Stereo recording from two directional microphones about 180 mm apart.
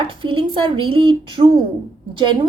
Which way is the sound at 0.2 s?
30° right (ahead or behind).